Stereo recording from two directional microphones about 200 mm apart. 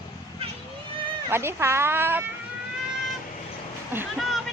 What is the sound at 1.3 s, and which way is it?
Speech, 10° right (ahead or behind).